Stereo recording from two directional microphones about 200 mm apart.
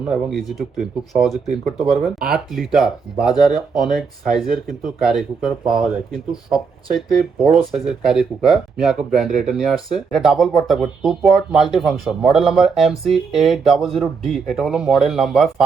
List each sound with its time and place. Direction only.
0.0 s speech: centre (ahead or behind)